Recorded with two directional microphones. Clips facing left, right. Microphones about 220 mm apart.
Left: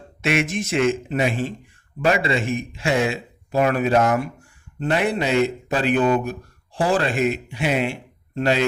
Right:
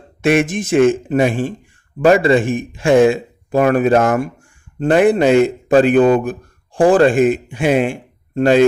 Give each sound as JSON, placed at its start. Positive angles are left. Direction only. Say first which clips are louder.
{"t": 0.2, "sound": "a man's voice", "louder": "right 7 dB", "side_deg": -50}